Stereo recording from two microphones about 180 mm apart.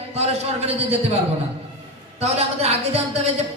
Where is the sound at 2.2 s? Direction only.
35° right (ahead or behind).